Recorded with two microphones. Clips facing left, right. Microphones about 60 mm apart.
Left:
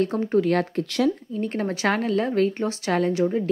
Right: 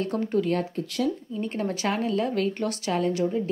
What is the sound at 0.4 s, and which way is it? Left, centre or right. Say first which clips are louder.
Speech: left 6 dB; left.